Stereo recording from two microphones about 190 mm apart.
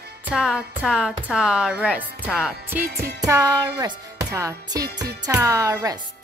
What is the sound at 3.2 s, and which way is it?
Music, 15° right (ahead or behind).